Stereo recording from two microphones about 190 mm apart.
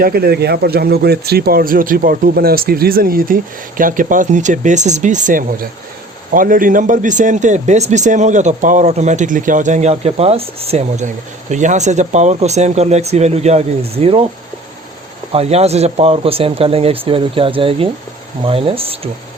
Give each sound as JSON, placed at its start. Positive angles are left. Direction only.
{"t": 0.0, "sound": "speech", "side_deg": -55}
{"t": 15.3, "sound": "speech", "side_deg": -35}